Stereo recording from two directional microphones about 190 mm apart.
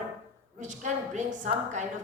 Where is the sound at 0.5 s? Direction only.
40° right (ahead or behind).